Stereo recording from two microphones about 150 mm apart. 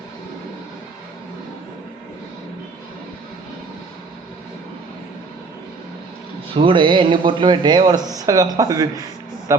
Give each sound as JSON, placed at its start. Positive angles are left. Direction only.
{"t": 6.5, "sound": "a man's voice", "side_deg": -35}